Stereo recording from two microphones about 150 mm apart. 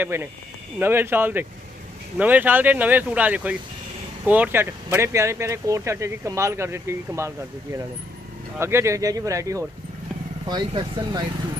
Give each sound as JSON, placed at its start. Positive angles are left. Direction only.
{"t": 0.0, "sound": "speech", "side_deg": -15}